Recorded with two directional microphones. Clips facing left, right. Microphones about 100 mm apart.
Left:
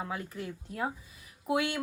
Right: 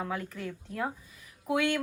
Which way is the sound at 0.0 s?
15° left (ahead or behind).